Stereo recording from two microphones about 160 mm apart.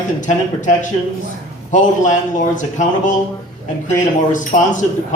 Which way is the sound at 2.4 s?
50° left (ahead or behind).